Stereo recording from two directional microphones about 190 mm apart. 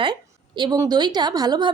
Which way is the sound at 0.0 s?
25° right (ahead or behind).